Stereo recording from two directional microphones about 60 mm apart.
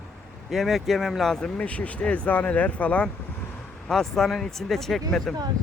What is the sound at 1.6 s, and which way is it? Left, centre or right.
Speech, left.